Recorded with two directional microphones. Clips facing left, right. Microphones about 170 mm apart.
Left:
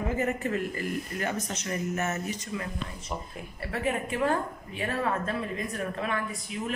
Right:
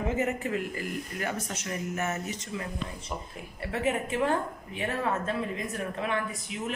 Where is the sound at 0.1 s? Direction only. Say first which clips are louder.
Left 2 dB; 15° right (ahead or behind).